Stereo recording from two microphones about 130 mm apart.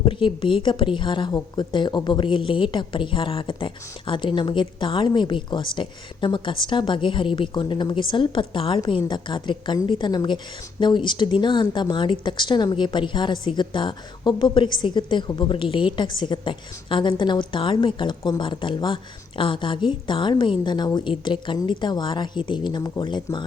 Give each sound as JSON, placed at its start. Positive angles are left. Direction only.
{"t": 0.0, "sound": "a woman's voice", "side_deg": 40}